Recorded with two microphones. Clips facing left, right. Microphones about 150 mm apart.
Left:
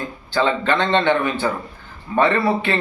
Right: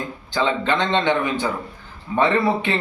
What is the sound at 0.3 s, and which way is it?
Speech, 15° right (ahead or behind).